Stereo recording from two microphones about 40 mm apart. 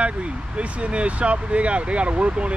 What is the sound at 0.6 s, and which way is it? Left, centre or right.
Speech, right.